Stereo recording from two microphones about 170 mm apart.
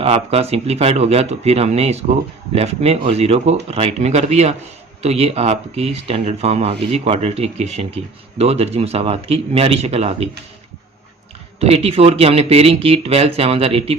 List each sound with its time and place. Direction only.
0.0 s speech: 35° right (ahead or behind)
11.6 s speech: 35° right (ahead or behind)